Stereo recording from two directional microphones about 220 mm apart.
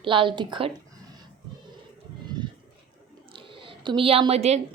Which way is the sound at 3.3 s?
25° right (ahead or behind).